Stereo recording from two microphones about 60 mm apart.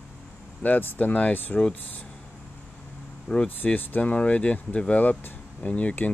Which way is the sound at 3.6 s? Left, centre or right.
Left.